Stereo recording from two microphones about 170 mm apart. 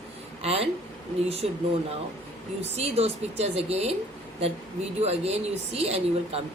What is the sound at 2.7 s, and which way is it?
A woman's voice, 35° right (ahead or behind).